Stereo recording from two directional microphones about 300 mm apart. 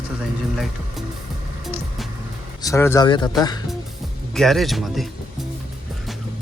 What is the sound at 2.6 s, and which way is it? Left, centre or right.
Speech, centre.